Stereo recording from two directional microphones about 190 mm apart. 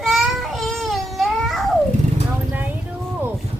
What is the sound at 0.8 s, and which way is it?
Babbling, centre (ahead or behind).